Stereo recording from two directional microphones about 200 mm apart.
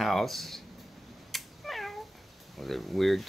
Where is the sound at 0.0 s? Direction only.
Centre (ahead or behind).